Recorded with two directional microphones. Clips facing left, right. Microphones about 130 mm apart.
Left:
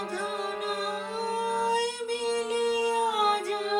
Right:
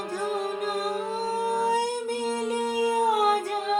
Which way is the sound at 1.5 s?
45° right (ahead or behind).